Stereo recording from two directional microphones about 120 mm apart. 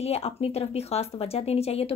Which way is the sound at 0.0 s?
60° left (ahead or behind).